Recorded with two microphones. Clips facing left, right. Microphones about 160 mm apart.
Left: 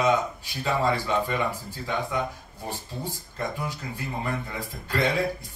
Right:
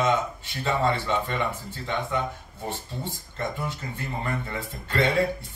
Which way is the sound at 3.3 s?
5° left (ahead or behind).